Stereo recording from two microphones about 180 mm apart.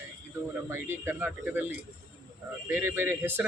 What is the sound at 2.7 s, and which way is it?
Speech, 10° right (ahead or behind).